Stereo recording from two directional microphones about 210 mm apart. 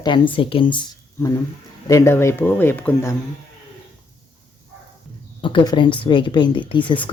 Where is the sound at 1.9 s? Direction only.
15° left (ahead or behind).